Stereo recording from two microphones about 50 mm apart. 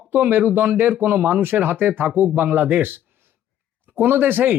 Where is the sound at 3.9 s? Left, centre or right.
Right.